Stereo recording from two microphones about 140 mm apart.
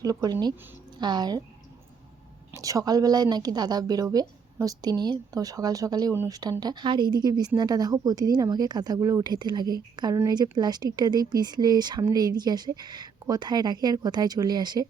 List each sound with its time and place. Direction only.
0.0 s speech: 25° right (ahead or behind)
2.6 s speech: 25° right (ahead or behind)